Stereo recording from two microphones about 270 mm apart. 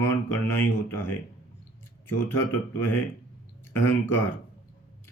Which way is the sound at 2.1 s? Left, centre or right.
Centre.